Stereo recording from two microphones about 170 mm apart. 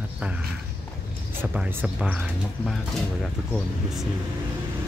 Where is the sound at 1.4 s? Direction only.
10° right (ahead or behind).